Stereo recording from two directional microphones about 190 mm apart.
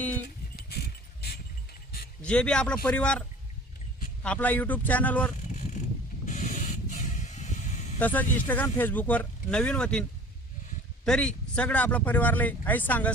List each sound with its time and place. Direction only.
0.5 s livestock: 55° left (ahead or behind)
2.2 s a man's voice: 5° left (ahead or behind)
6.2 s spray: 40° left (ahead or behind)
7.9 s speech: 10° left (ahead or behind)